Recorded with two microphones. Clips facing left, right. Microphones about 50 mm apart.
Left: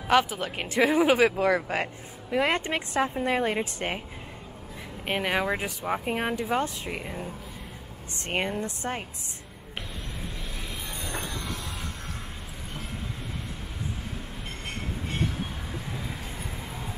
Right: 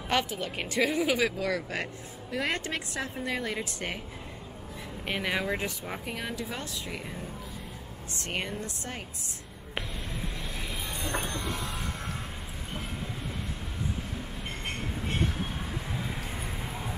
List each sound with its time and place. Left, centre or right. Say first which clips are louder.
0.1 s speech: left 6 dB; centre
1.0 s a woman's voice: left 6 dB; left
5.0 s speech: left 4 dB; centre
6.0 s a woman's voice: left 6 dB; left
8.3 s a woman's voice: left 6 dB; left
10.9 s a sound: right 2 dB; centre
15.0 s train: even; centre
16.3 s a sound: right 1 dB; centre